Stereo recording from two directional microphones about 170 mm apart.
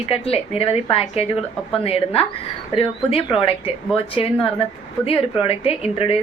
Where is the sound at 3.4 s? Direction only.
30° left (ahead or behind).